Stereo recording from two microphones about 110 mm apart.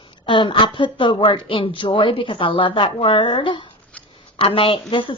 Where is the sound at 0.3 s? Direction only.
50° left (ahead or behind).